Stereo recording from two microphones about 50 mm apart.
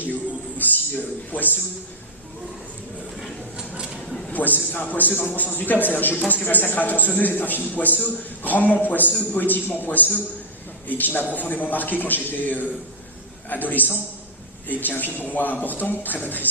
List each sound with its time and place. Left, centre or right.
0.6 s a sound: left
1.3 s a man's voice: left
4.3 s a man's voice: left